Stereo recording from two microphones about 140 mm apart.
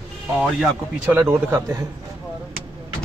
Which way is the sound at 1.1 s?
15° right (ahead or behind).